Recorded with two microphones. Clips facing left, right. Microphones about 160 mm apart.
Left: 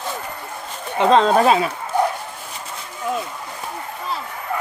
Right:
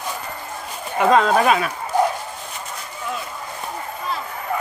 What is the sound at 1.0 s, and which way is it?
Speech, 30° left (ahead or behind).